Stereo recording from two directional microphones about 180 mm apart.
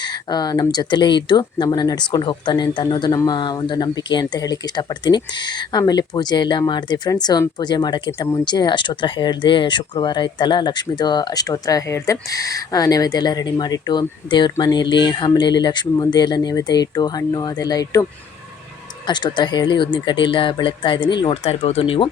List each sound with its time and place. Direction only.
0.0 s speech: 25° left (ahead or behind)
19.0 s speech: 25° left (ahead or behind)